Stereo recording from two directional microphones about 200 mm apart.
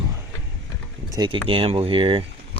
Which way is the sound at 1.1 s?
20° right (ahead or behind).